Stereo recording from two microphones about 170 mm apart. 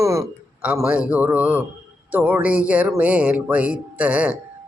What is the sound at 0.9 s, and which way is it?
Speech, 10° right (ahead or behind).